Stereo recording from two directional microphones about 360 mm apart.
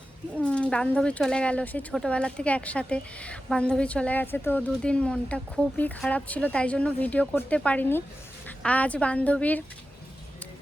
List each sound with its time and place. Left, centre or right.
0.3 s speech: centre